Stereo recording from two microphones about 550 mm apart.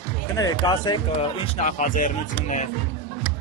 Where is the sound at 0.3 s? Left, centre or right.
Centre.